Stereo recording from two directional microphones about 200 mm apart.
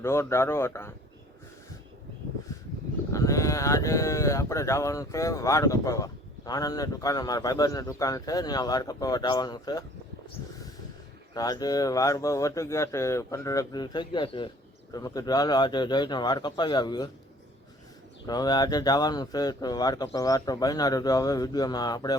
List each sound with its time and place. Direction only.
0.0 s speech: 15° left (ahead or behind)
3.1 s speech: 15° left (ahead or behind)
11.3 s speech: 20° left (ahead or behind)
18.3 s speech: 20° left (ahead or behind)